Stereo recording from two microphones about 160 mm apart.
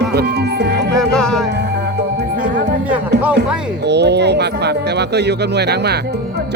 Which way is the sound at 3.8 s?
90° right.